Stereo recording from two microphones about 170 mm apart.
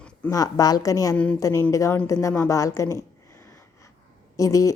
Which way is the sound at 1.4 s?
20° left (ahead or behind).